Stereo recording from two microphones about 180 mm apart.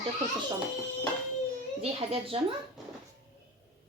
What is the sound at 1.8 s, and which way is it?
Speech, 30° right (ahead or behind).